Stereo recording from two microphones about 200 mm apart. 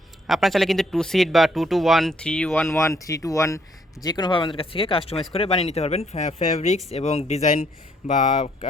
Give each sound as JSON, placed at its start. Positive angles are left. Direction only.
{"t": 0.3, "sound": "speech", "side_deg": 0}
{"t": 2.7, "sound": "speech", "side_deg": 15}